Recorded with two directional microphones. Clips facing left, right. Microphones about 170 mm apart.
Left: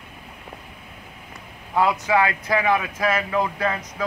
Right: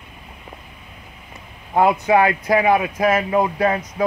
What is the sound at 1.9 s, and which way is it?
Speech, 25° right (ahead or behind).